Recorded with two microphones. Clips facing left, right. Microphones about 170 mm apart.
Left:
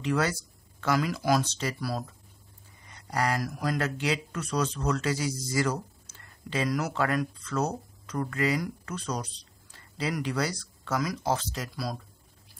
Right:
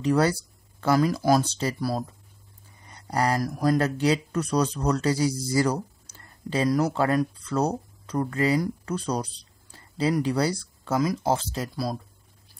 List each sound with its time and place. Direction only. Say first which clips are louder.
0.0 s speech: right 6 dB; 35° right (ahead or behind)